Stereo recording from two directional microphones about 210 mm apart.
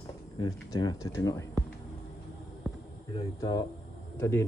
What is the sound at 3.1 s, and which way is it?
Speech, 20° left (ahead or behind).